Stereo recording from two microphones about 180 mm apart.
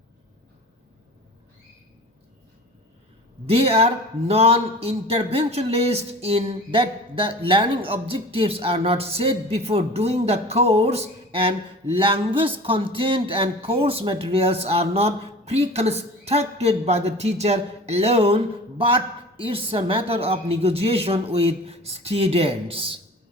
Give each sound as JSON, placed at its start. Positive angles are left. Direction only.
{"t": 3.5, "sound": "speech", "side_deg": -35}